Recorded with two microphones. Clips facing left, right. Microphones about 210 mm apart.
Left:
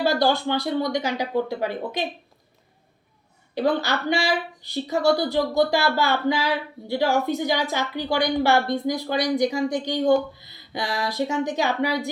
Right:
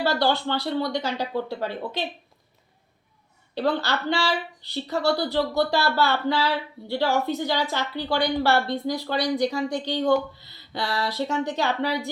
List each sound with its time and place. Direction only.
0.0 s speech: 15° left (ahead or behind)
3.5 s speech: 15° left (ahead or behind)